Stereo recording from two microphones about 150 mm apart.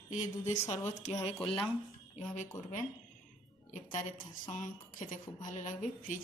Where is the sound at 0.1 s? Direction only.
50° left (ahead or behind).